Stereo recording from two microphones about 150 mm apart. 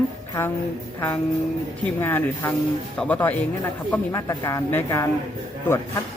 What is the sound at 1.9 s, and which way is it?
Speech, 15° left (ahead or behind).